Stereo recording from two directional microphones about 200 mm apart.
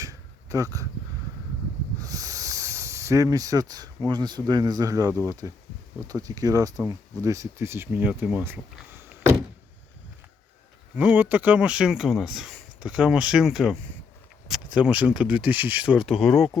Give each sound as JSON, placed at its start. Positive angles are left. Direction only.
{"t": 0.0, "sound": "a sound", "side_deg": -15}
{"t": 2.0, "sound": "speech", "side_deg": -15}
{"t": 9.0, "sound": "door", "side_deg": -10}
{"t": 10.9, "sound": "speech", "side_deg": -5}